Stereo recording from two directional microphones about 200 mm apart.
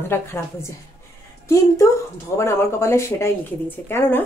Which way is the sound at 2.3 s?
15° left (ahead or behind).